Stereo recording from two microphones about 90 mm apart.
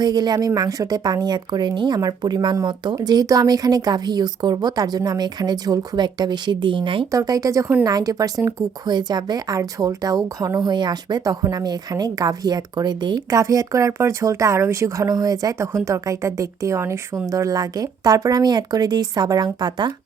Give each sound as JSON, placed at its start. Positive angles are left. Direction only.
{"t": 0.0, "sound": "speech", "side_deg": -50}
{"t": 2.0, "sound": "speech", "side_deg": -45}
{"t": 7.1, "sound": "speech", "side_deg": -40}
{"t": 8.9, "sound": "speech", "side_deg": -50}
{"t": 13.3, "sound": "speech", "side_deg": -40}